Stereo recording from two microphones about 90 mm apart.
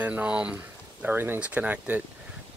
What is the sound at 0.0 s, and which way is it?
Speech, 15° right (ahead or behind).